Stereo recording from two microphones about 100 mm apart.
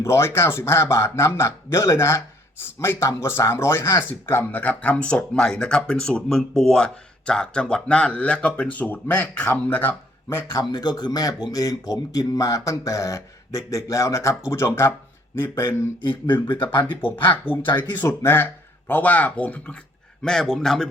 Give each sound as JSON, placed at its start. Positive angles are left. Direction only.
{"t": 0.0, "sound": "a man's voice", "side_deg": 25}
{"t": 10.6, "sound": "a man's voice", "side_deg": 45}
{"t": 16.0, "sound": "speech", "side_deg": 55}
{"t": 17.4, "sound": "a man's voice", "side_deg": 20}